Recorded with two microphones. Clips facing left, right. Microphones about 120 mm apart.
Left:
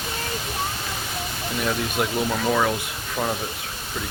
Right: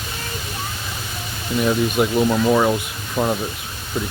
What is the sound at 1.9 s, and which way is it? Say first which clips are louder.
Speech: right 6 dB; 20° right (ahead or behind).